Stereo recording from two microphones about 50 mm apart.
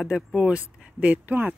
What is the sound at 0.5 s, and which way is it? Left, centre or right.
Speech, right.